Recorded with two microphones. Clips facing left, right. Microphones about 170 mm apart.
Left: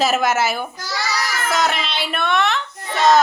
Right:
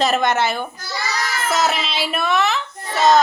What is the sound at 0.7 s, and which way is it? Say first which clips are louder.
Speech: left 2 dB; 90° left.